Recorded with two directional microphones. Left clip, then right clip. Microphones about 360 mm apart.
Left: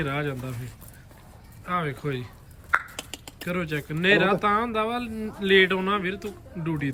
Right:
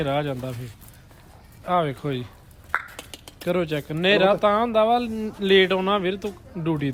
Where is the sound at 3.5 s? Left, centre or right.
Centre.